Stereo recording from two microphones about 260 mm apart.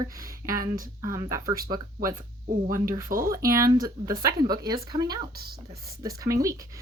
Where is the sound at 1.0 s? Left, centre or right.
Centre.